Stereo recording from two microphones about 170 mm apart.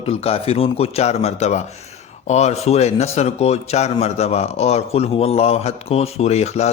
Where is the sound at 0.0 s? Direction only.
35° left (ahead or behind).